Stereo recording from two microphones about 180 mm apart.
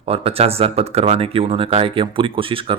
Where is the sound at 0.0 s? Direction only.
30° right (ahead or behind).